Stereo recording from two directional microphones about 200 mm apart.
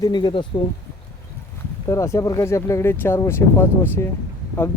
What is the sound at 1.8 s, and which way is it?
Speech, 15° left (ahead or behind).